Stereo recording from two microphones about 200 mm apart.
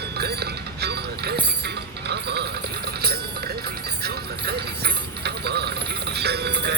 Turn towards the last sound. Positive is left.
turn(degrees=-55)  # may be behind; listen again after turning